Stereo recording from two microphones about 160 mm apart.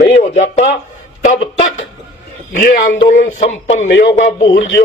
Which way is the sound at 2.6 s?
60° left (ahead or behind).